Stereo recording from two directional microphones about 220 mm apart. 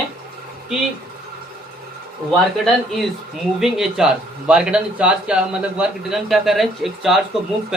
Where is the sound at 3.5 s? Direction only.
Centre (ahead or behind).